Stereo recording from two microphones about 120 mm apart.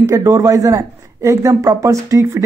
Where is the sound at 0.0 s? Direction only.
30° right (ahead or behind).